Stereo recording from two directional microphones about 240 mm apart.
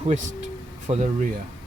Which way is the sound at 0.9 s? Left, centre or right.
Right.